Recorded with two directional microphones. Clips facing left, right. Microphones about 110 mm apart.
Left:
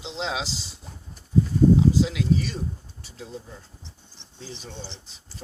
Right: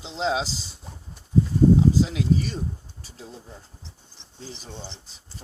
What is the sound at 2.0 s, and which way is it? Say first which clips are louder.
Speech: even; 35° right (ahead or behind).